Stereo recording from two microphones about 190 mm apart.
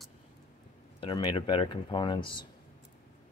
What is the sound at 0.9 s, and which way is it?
Speech, 25° left (ahead or behind).